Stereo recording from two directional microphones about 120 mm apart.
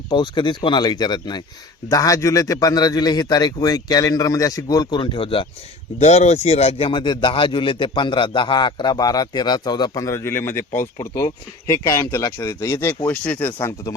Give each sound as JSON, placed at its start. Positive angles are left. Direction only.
{"t": 0.1, "sound": "a man's voice", "side_deg": 40}
{"t": 6.0, "sound": "a man's voice", "side_deg": 70}
{"t": 11.9, "sound": "speech", "side_deg": 25}
{"t": 13.1, "sound": "speech", "side_deg": 15}
{"t": 13.6, "sound": "speech", "side_deg": 25}